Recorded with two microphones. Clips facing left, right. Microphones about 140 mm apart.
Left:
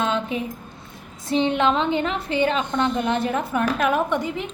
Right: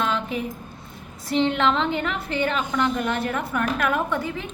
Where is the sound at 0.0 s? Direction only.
20° left (ahead or behind).